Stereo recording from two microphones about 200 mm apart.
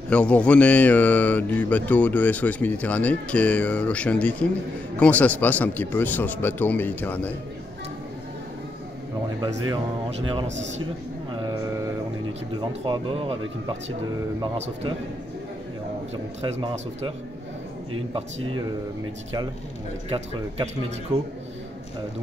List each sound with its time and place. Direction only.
0.1 s speech: 5° left (ahead or behind)
9.7 s speech: 25° right (ahead or behind)
11.4 s speech: 20° right (ahead or behind)
16.6 s speech: 25° right (ahead or behind)
20.1 s speech: 30° right (ahead or behind)